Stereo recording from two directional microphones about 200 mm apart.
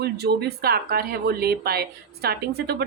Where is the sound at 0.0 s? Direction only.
55° right (ahead or behind).